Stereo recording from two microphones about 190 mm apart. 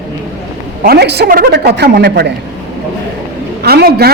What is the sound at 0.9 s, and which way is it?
A man's voice, 60° right (ahead or behind).